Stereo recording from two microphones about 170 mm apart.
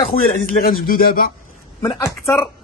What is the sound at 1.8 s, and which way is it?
Speech, 25° left (ahead or behind).